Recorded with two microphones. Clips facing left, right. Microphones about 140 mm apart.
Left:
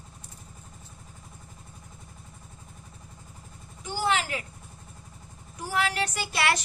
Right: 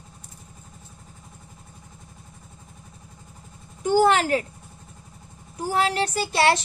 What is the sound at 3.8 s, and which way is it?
Speech, 50° right (ahead or behind).